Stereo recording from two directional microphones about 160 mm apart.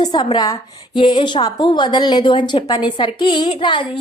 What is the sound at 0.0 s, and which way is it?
A woman's voice, 25° left (ahead or behind).